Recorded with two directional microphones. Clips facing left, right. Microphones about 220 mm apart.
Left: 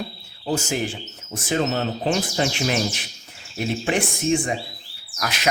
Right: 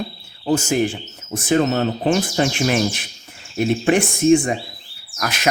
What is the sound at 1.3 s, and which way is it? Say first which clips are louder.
Speech: right 5 dB; 50° right (ahead or behind).